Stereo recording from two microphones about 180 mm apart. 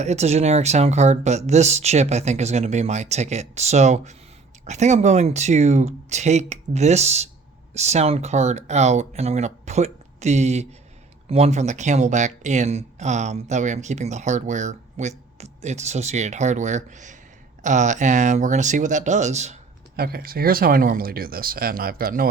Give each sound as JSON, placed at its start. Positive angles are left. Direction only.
{"t": 0.0, "sound": "speech", "side_deg": -40}
{"t": 20.0, "sound": "speech", "side_deg": -55}